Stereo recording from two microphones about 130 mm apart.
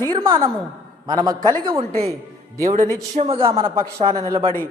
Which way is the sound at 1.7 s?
50° right (ahead or behind).